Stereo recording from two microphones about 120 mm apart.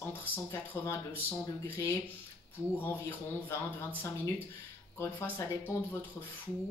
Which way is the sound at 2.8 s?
15° left (ahead or behind).